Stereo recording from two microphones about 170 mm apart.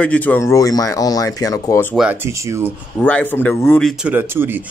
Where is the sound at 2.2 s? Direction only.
15° right (ahead or behind).